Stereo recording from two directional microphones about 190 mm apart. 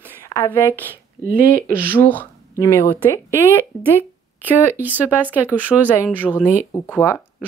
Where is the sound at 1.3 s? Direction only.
50° right (ahead or behind).